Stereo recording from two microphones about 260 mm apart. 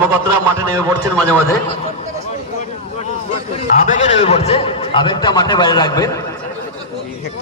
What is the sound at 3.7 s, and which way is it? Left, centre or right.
A man's voice, left.